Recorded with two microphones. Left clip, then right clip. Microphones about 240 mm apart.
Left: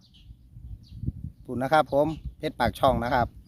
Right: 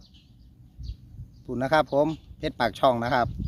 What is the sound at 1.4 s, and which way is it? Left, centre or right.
Speech, centre.